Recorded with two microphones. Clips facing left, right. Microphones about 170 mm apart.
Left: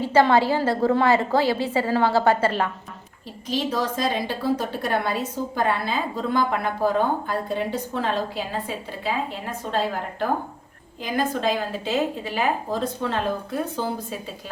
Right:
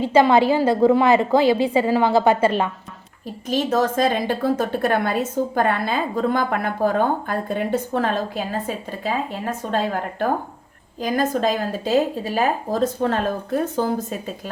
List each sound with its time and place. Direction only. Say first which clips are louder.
0.0 s a woman's voice: right 3 dB; 15° right (ahead or behind)
3.5 s a woman's voice: right 5 dB; 50° right (ahead or behind)
11.0 s a woman's voice: right 4 dB; 40° right (ahead or behind)